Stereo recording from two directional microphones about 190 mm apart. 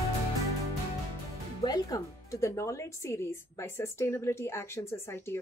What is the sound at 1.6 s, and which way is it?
Speech, 20° left (ahead or behind).